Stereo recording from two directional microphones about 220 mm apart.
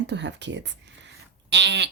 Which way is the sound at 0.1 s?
50° right (ahead or behind).